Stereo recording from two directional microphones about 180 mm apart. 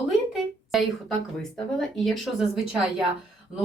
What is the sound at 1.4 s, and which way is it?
A woman's voice, 5° left (ahead or behind).